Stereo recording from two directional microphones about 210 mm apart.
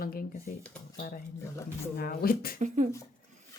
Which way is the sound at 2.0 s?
45° left (ahead or behind).